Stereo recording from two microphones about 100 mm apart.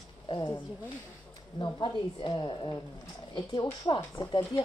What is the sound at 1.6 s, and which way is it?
Speech, 50° left (ahead or behind).